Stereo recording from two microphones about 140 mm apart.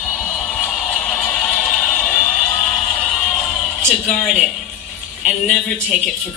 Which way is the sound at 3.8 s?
Centre (ahead or behind).